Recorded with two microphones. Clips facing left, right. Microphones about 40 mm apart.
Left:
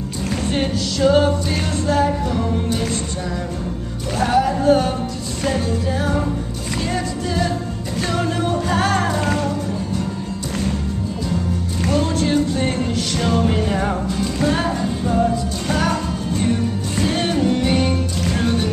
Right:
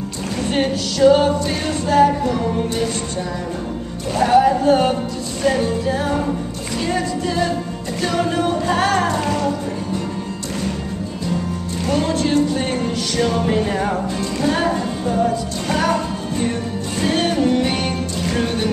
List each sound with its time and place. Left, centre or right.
1.1 s music: centre
4.3 s music: centre
11.9 s music: centre